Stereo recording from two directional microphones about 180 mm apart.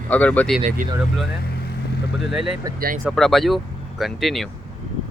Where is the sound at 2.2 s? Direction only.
5° right (ahead or behind).